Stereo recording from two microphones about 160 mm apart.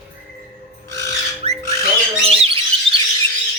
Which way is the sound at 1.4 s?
40° right (ahead or behind).